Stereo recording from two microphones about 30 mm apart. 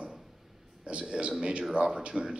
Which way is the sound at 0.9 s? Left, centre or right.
Right.